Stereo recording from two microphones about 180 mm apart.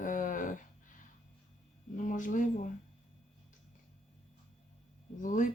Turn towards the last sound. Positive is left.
turn(degrees=45)  # may be behind; listen again after turning